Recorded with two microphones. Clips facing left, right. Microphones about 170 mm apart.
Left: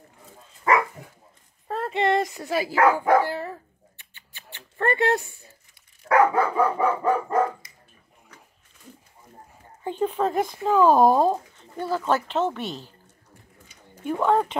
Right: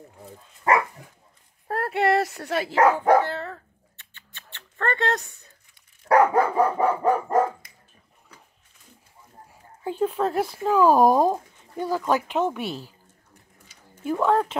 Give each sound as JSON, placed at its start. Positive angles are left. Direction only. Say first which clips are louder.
{"t": 1.7, "sound": "speech", "louder": "right 1 dB", "side_deg": -10}
{"t": 3.3, "sound": "a sound", "louder": "left 1 dB", "side_deg": 15}
{"t": 6.0, "sound": "dog", "louder": "right 1 dB", "side_deg": -40}
{"t": 7.6, "sound": "dog", "louder": "left 1 dB", "side_deg": -55}
{"t": 9.8, "sound": "speech", "louder": "even", "side_deg": -5}
{"t": 14.1, "sound": "speech", "louder": "even", "side_deg": 0}